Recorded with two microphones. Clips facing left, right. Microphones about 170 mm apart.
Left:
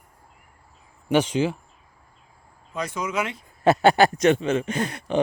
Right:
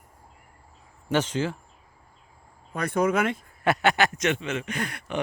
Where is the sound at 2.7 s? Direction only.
55° right (ahead or behind).